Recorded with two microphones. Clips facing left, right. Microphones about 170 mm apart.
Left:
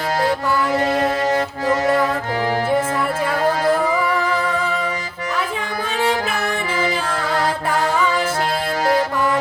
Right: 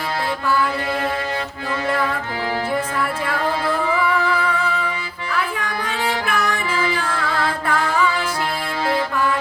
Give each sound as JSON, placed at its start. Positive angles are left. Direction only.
{"t": 3.3, "sound": "music", "side_deg": 40}
{"t": 5.3, "sound": "music", "side_deg": 20}
{"t": 7.3, "sound": "mantra", "side_deg": 45}